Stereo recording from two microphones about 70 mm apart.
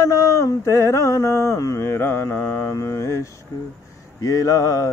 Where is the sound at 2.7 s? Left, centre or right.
Left.